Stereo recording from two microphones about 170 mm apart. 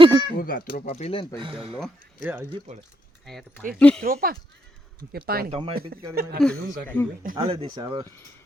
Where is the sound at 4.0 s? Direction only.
60° right (ahead or behind).